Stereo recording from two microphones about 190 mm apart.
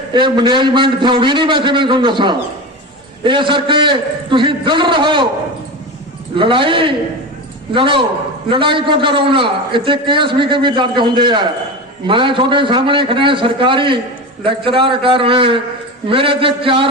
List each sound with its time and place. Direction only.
0.1 s a man's voice: 25° right (ahead or behind)
6.3 s a man's voice: 25° right (ahead or behind)